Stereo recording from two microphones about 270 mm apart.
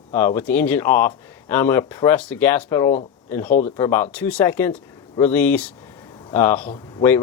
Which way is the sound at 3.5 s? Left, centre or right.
Left.